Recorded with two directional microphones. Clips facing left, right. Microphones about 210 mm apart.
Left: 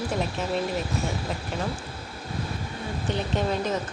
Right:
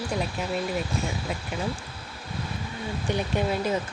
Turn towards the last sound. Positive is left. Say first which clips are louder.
# even
turn(degrees=-10)  # may be behind; listen again after turning